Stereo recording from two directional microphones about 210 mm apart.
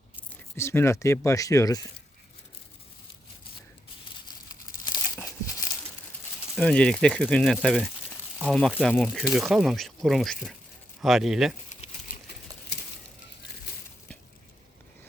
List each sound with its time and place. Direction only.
0.2 s speech: 10° left (ahead or behind)
4.9 s crumpling: 15° left (ahead or behind)
6.6 s speech: 5° left (ahead or behind)